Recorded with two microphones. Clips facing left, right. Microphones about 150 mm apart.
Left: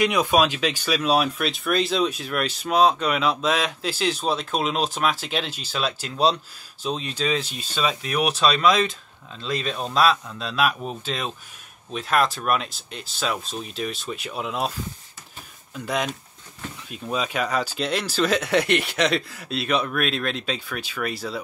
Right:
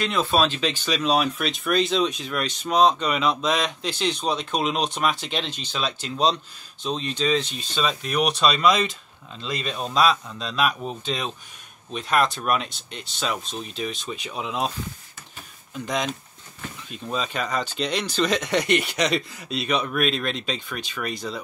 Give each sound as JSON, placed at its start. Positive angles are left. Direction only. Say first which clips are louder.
{"t": 0.0, "sound": "speech", "louder": "left 2 dB", "side_deg": 15}
{"t": 15.7, "sound": "speech", "louder": "even", "side_deg": 5}